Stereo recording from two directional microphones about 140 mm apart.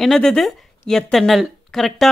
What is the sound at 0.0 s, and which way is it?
A woman's voice, 5° left (ahead or behind).